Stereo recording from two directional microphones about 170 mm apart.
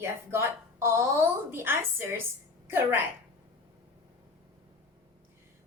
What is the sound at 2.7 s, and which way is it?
Speech, 15° right (ahead or behind).